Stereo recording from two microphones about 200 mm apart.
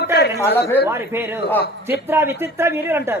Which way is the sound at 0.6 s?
10° left (ahead or behind).